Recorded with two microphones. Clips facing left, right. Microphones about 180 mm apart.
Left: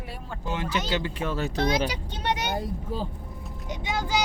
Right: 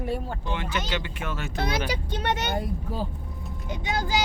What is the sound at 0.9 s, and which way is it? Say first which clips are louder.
Speech: left 3 dB; 35° left (ahead or behind).